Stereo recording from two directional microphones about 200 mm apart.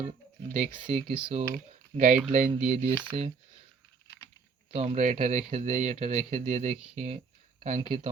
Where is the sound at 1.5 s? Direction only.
40° right (ahead or behind).